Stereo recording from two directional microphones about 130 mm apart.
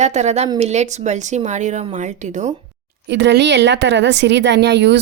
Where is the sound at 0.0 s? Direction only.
60° right (ahead or behind).